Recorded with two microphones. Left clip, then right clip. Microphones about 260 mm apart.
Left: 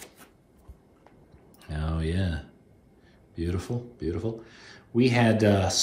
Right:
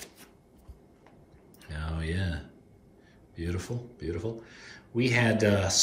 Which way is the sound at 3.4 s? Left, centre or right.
Centre.